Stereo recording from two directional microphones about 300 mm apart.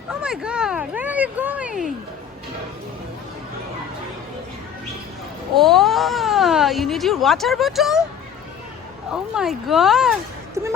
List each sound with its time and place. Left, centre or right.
0.1 s speech: centre
5.5 s speech: centre
9.1 s speech: centre